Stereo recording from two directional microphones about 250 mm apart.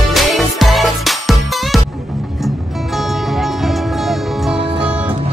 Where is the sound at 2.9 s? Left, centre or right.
Centre.